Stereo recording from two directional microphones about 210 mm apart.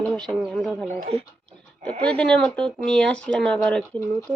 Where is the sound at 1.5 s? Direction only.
5° left (ahead or behind).